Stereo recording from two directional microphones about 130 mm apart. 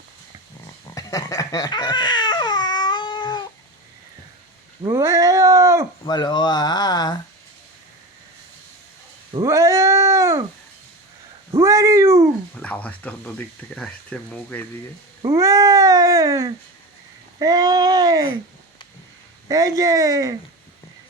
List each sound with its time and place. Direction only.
0.9 s crying: 25° left (ahead or behind)
4.8 s cat: 20° right (ahead or behind)
6.1 s speech: 35° left (ahead or behind)
9.3 s cat: 25° right (ahead or behind)
11.5 s cat: 25° right (ahead or behind)
12.5 s speech: 10° left (ahead or behind)
15.3 s speech: 25° right (ahead or behind)
19.5 s speech: 25° right (ahead or behind)